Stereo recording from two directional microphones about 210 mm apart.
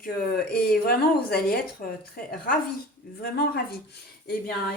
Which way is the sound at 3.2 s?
45° left (ahead or behind).